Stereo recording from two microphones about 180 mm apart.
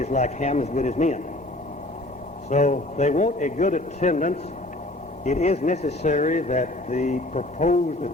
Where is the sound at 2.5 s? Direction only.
40° left (ahead or behind).